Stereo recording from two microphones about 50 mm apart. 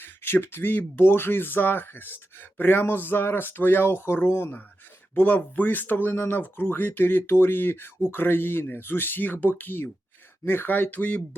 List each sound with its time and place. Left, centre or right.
0.0 s speech: left
5.1 s speech: left